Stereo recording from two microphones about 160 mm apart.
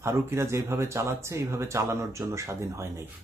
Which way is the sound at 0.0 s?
15° right (ahead or behind).